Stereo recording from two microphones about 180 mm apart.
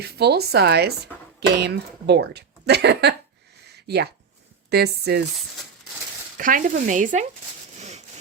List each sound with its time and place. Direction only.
0.0 s speech: 65° right (ahead or behind)
6.3 s speech: 50° right (ahead or behind)
7.8 s sawing: 40° right (ahead or behind)